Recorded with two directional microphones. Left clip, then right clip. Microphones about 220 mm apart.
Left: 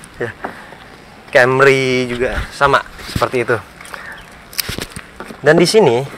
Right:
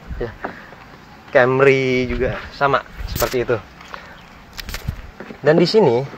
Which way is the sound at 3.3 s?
10° left (ahead or behind).